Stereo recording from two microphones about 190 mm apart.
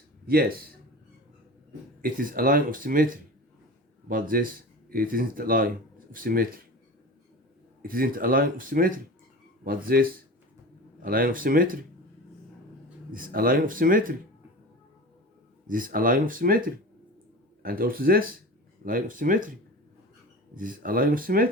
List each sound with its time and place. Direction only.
0.3 s speech: 50° right (ahead or behind)
2.0 s speech: 50° right (ahead or behind)
7.8 s speech: 50° right (ahead or behind)
13.1 s speech: 45° right (ahead or behind)
15.6 s speech: 45° right (ahead or behind)
20.6 s speech: 45° right (ahead or behind)